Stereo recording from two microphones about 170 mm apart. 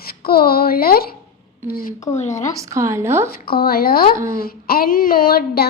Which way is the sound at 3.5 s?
65° left (ahead or behind).